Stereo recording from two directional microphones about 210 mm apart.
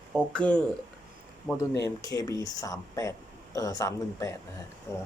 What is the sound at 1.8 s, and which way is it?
Speech, 15° left (ahead or behind).